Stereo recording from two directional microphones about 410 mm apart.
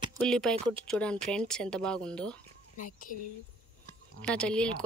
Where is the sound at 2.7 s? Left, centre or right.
Centre.